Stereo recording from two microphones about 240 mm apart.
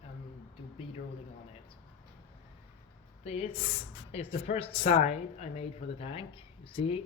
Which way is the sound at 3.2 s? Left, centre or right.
Left.